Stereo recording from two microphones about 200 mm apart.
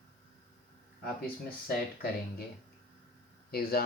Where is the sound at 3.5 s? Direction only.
50° left (ahead or behind).